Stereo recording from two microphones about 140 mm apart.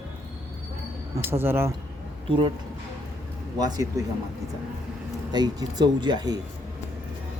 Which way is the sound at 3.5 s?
25° right (ahead or behind).